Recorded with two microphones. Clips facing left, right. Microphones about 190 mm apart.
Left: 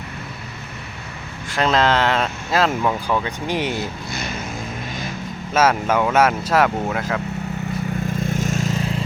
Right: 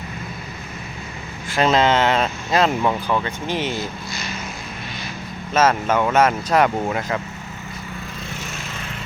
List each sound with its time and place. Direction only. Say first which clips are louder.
1.5 s speech: right 1 dB; centre (ahead or behind)
3.2 s speech: left 1 dB; 15° left (ahead or behind)
3.8 s speech: left 2 dB; 60° left (ahead or behind)
5.5 s speech: even; 10° left (ahead or behind)
8.2 s vehicle: left 10 dB; 45° left (ahead or behind)